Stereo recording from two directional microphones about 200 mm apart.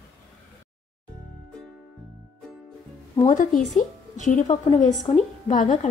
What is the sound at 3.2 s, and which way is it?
A woman's voice, 35° left (ahead or behind).